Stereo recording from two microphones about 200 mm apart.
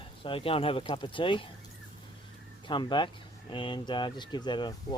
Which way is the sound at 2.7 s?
25° left (ahead or behind).